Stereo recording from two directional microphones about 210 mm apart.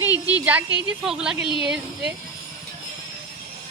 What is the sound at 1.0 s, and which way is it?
Speech, 5° right (ahead or behind).